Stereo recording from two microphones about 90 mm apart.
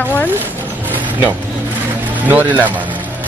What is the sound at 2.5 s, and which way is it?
Speech, 20° right (ahead or behind).